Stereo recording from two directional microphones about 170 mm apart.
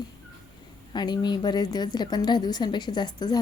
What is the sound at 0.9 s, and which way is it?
A woman's voice, 25° left (ahead or behind).